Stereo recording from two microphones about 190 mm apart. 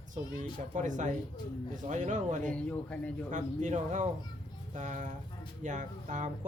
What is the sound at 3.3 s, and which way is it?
Speech, 40° right (ahead or behind).